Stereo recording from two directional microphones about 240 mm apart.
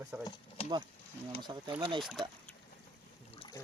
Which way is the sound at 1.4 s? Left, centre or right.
Centre.